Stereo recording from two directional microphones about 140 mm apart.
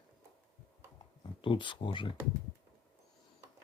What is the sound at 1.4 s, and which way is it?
Speech, 35° left (ahead or behind).